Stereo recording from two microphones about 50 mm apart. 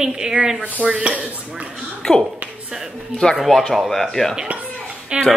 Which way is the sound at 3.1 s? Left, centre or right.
Centre.